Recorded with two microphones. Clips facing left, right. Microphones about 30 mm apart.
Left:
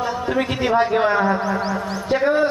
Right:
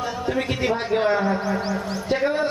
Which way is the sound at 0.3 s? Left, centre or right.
Left.